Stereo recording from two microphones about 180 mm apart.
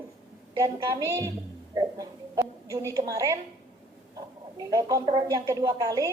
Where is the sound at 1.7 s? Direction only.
20° right (ahead or behind).